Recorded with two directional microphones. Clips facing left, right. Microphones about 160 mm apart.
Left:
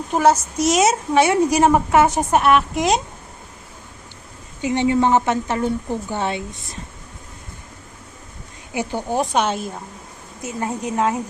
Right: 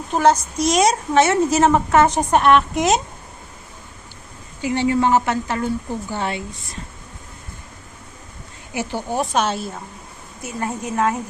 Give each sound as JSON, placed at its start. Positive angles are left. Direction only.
{"t": 0.1, "sound": "a woman's voice", "side_deg": 10}
{"t": 4.6, "sound": "a woman's voice", "side_deg": 20}
{"t": 8.7, "sound": "a woman's voice", "side_deg": 20}